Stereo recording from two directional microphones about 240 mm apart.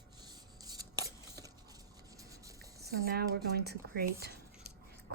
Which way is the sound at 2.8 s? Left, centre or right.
Right.